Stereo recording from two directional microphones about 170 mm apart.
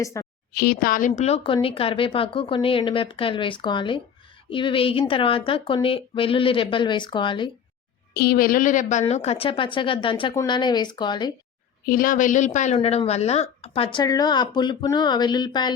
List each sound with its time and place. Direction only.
0.0 s a woman's voice: 20° left (ahead or behind)
0.5 s a woman's voice: 65° left (ahead or behind); by 7.5 s 30° left (ahead or behind)
8.1 s a woman's voice: 60° left (ahead or behind); by 11.3 s 25° left (ahead or behind)
11.9 s a woman's voice: 55° left (ahead or behind); by 15.7 s 25° left (ahead or behind)